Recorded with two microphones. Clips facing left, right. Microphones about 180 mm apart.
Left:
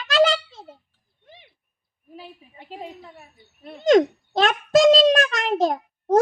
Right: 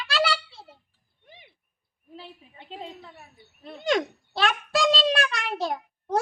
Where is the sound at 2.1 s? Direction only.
5° left (ahead or behind).